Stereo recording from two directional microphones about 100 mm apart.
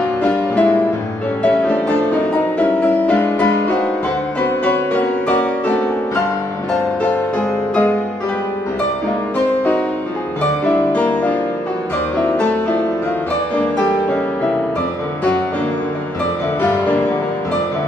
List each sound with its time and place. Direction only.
0.2 s music: 15° left (ahead or behind)
4.6 s music: 15° left (ahead or behind)
10.6 s music: 15° left (ahead or behind)